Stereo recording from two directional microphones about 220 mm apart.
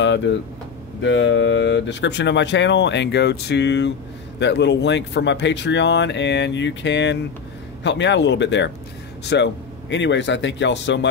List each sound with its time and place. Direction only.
0.0 s speech: 55° left (ahead or behind)